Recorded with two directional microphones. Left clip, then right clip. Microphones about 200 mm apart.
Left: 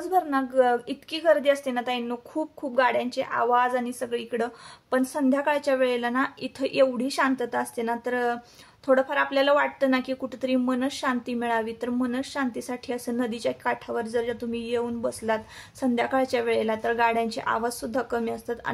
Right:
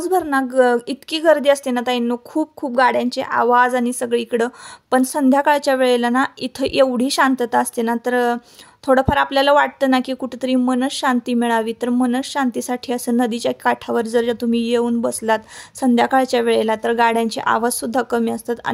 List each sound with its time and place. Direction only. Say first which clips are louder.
0.0 s a woman's voice: right 6 dB; 50° right (ahead or behind)